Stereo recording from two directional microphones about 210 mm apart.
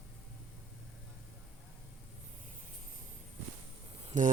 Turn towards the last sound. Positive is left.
turn(degrees=-35)  # may be behind; listen again after turning